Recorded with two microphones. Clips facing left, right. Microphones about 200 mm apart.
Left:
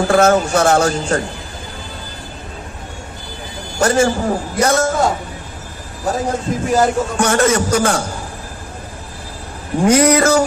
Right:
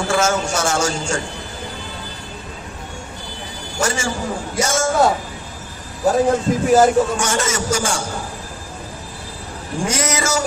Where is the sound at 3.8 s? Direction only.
60° left (ahead or behind).